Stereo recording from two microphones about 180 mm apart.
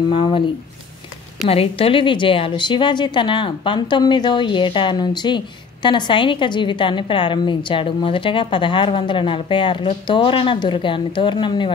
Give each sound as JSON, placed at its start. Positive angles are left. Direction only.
{"t": 0.1, "sound": "a woman's voice", "side_deg": 30}
{"t": 1.5, "sound": "a woman's voice", "side_deg": 30}